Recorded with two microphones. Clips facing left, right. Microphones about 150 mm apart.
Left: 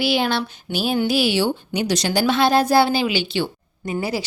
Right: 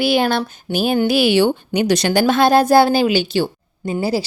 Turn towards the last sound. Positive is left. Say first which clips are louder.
# right 5 dB
turn(degrees=-30)  # may be behind; listen again after turning